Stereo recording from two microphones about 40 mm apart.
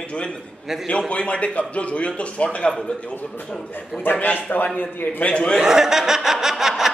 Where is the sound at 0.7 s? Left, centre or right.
Centre.